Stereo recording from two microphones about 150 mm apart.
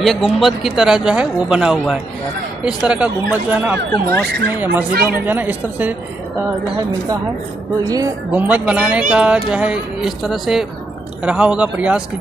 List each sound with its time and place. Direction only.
0.0 s speech: centre (ahead or behind)
3.9 s turkey: 90° right
5.0 s speech: 10° right (ahead or behind)
7.8 s speech: 25° right (ahead or behind)
8.3 s speech: 10° right (ahead or behind)